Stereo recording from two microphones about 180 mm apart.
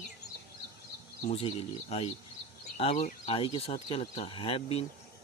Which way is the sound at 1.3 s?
35° left (ahead or behind).